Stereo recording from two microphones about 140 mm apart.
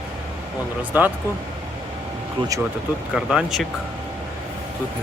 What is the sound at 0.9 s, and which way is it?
Speech, 10° right (ahead or behind).